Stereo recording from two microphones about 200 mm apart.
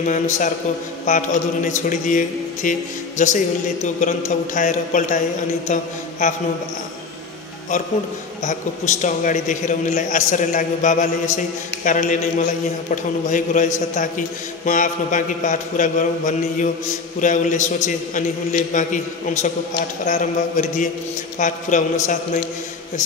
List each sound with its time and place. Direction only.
0.0 s a man's voice: 40° left (ahead or behind)
5.7 s a sound: 40° left (ahead or behind)
8.5 s a man's voice: 35° left (ahead or behind)